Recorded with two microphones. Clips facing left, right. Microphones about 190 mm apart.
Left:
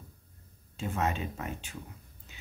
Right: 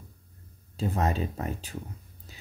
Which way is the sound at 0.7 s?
35° right (ahead or behind).